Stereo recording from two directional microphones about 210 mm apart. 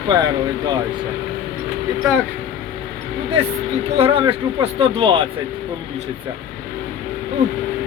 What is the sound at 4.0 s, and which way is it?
Speech, 25° right (ahead or behind).